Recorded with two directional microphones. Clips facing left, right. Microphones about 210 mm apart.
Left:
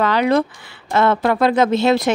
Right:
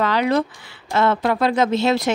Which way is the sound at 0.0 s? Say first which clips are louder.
Left 3 dB; 55° left (ahead or behind).